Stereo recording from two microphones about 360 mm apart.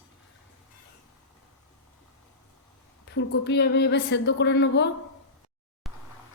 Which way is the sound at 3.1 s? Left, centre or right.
Left.